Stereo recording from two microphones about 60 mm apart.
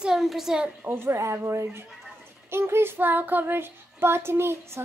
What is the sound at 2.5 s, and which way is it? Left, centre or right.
Child singing, right.